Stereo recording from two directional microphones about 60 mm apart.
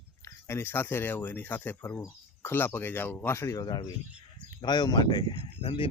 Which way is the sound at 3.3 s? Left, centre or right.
Left.